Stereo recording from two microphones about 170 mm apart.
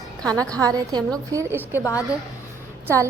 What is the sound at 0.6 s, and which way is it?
A woman's voice, 20° right (ahead or behind).